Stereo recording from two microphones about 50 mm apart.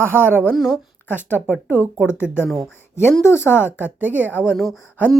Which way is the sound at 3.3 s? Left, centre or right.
Right.